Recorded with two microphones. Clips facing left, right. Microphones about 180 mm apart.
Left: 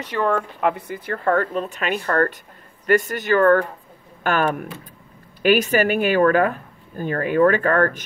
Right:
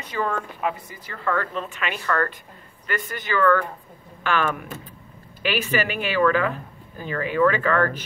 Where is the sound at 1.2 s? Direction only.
45° left (ahead or behind).